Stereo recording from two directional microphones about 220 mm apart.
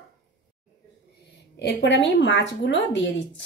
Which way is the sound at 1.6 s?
50° left (ahead or behind).